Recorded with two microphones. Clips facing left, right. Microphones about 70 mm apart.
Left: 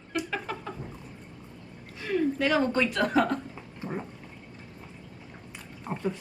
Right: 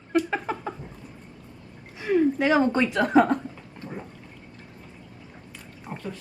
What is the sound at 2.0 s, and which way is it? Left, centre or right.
Speech, centre.